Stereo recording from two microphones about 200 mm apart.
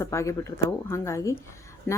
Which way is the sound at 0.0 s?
15° left (ahead or behind).